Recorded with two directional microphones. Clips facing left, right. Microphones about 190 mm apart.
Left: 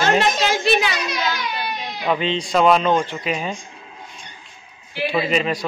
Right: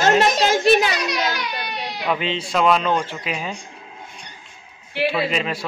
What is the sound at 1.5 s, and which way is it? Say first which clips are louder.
Baby cry: left 1 dB; 65° right (ahead or behind).